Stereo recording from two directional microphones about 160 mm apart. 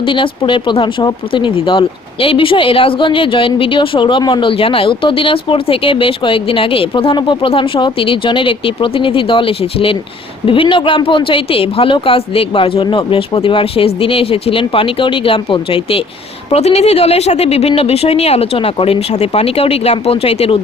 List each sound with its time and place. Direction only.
0.0 s speech: 30° left (ahead or behind)